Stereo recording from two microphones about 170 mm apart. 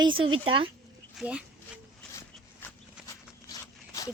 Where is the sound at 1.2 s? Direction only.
5° right (ahead or behind).